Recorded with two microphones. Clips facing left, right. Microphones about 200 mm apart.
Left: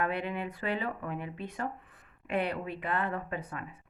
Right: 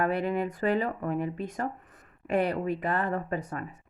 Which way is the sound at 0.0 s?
40° right (ahead or behind).